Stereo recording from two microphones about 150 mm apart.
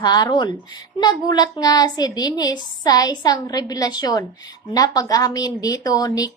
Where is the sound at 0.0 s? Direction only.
25° left (ahead or behind).